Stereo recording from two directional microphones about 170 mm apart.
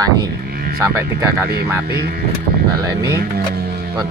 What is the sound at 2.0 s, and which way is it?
Speech, 65° right (ahead or behind).